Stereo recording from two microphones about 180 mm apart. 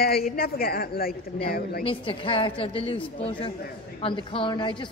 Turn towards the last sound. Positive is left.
turn(degrees=25)  # may be behind; listen again after turning